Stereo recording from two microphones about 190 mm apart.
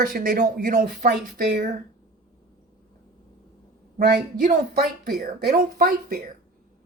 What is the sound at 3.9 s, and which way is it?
Speech, 45° right (ahead or behind).